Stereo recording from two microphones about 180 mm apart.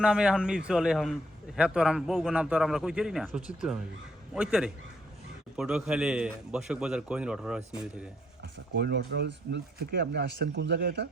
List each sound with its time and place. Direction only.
0.0 s speech: 5° right (ahead or behind)
8.5 s speech: 70° right (ahead or behind)